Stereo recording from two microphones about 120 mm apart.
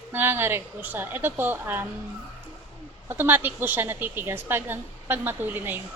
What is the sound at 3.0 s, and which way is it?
A woman's voice, 15° right (ahead or behind).